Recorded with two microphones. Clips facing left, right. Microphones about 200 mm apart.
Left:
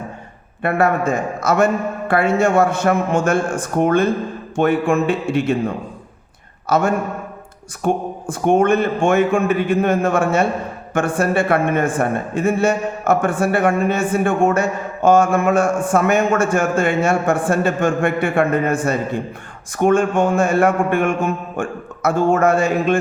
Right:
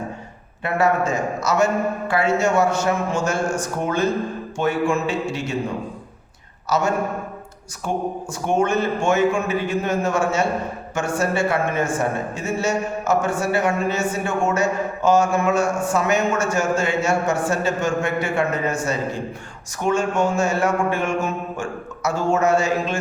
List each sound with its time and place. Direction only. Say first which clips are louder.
0.6 s a man's voice: left 3 dB; 55° left (ahead or behind)